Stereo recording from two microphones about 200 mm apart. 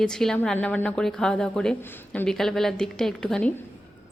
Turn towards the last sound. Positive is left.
turn(degrees=5)  # may be behind; listen again after turning